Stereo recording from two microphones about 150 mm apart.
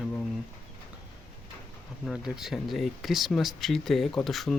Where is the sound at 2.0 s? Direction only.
Centre (ahead or behind).